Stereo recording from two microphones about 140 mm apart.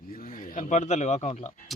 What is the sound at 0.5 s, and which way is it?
Speech, 65° left (ahead or behind).